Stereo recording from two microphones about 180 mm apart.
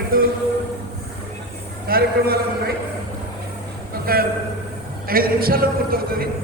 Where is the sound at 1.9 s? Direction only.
60° right (ahead or behind).